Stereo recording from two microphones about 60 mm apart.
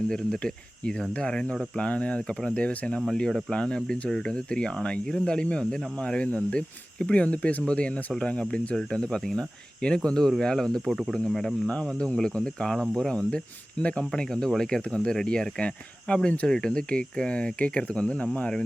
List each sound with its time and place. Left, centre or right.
0.1 s speech: centre
3.1 s speech: centre